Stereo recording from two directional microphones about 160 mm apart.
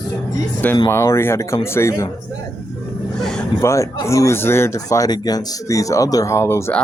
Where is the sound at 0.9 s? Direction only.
15° left (ahead or behind).